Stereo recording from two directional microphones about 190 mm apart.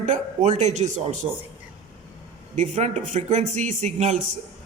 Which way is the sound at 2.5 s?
35° right (ahead or behind).